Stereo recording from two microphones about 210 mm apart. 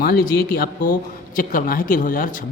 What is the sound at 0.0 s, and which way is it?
Speech, 45° left (ahead or behind).